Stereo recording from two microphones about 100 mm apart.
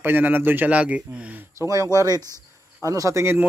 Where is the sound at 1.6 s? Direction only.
30° right (ahead or behind).